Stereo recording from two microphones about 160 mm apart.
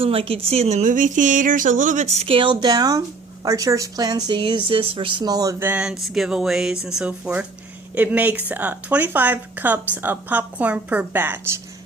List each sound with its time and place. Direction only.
0.0 s a woman's voice: 35° right (ahead or behind); by 11.6 s 15° right (ahead or behind)